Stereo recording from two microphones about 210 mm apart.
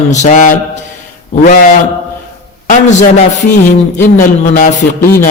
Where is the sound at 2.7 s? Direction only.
35° left (ahead or behind).